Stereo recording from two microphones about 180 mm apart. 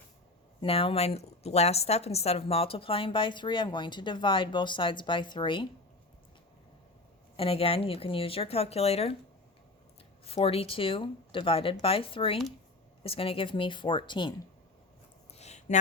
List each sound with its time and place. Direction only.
0.6 s a woman's voice: 30° left (ahead or behind)
7.3 s speech: 35° left (ahead or behind)
10.2 s a woman's voice: 30° left (ahead or behind)
15.3 s a sound: 35° left (ahead or behind)